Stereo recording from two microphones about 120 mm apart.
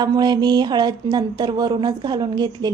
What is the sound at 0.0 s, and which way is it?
Speech, 35° right (ahead or behind).